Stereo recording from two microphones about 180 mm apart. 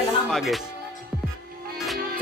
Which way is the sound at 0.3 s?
Centre (ahead or behind).